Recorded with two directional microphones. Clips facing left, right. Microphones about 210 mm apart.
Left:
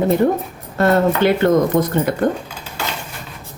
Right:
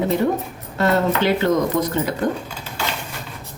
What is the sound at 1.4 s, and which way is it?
Speech, 55° left (ahead or behind).